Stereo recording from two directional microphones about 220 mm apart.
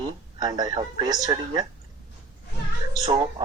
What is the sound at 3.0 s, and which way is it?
Speech, 25° right (ahead or behind).